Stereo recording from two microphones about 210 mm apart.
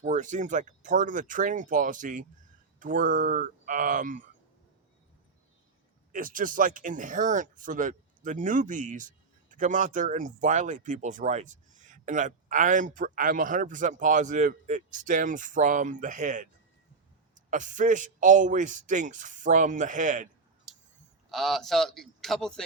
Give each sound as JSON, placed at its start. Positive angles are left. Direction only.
{"t": 0.0, "sound": "speech", "side_deg": -35}
{"t": 6.1, "sound": "speech", "side_deg": -40}
{"t": 17.5, "sound": "speech", "side_deg": -35}
{"t": 20.7, "sound": "a sound", "side_deg": 0}
{"t": 21.2, "sound": "a man's voice", "side_deg": 0}